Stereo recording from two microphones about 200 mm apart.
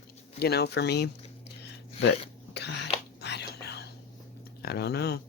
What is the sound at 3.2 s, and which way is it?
Whispering, 55° left (ahead or behind).